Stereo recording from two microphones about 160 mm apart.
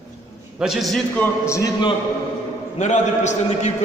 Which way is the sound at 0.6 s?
Centre (ahead or behind).